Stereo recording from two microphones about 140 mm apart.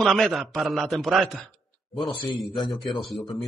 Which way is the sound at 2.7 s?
Centre (ahead or behind).